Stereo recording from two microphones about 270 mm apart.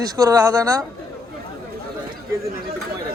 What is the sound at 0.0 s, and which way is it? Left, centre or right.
Speech, centre.